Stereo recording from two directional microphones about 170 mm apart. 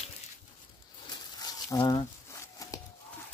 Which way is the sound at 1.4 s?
25° left (ahead or behind).